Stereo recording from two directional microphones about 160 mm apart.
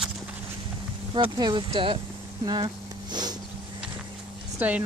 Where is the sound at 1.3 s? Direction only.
25° right (ahead or behind).